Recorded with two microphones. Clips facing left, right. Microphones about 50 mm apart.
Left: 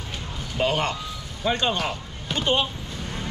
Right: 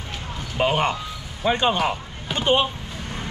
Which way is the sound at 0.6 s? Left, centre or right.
Right.